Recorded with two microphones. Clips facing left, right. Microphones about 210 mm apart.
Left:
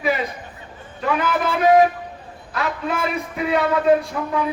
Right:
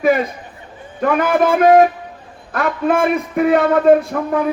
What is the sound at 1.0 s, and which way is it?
Speech, 50° right (ahead or behind).